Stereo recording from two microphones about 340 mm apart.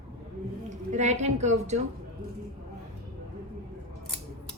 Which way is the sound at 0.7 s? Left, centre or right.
Right.